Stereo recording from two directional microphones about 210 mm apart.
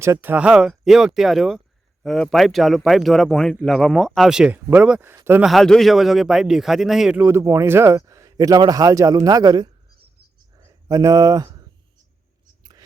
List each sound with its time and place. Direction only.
0.0 s speech: 10° right (ahead or behind)